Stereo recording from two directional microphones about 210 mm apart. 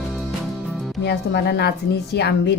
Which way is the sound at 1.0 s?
50° left (ahead or behind).